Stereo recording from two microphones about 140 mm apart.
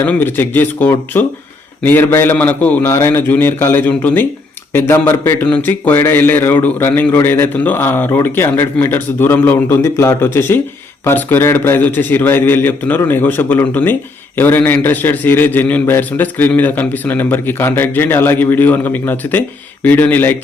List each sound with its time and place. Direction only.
0.0 s a man's voice: 15° left (ahead or behind)